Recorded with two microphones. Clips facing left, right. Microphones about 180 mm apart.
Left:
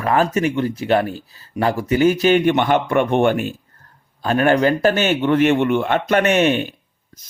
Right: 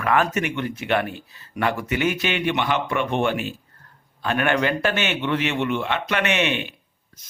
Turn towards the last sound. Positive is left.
turn(degrees=40)  # may be behind; listen again after turning